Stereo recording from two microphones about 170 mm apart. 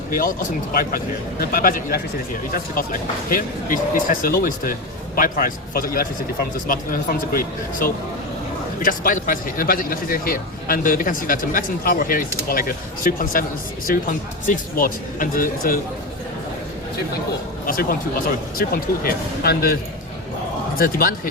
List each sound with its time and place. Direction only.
0.1 s a man's voice: 50° left (ahead or behind)
17.7 s a man's voice: 60° left (ahead or behind)